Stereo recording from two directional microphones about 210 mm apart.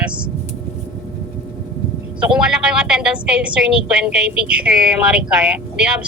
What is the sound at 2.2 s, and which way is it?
A woman's voice, 5° right (ahead or behind).